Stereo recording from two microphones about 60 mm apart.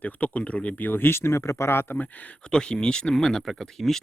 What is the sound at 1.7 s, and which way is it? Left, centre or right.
Speech, left.